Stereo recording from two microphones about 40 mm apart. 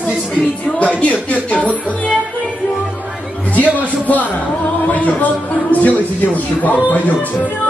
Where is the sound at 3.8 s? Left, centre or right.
Left.